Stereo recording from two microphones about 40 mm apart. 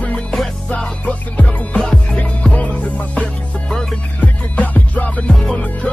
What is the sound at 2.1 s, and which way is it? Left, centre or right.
Music, left.